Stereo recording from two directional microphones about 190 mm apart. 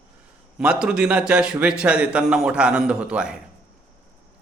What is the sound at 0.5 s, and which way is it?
A man's voice, 5° right (ahead or behind).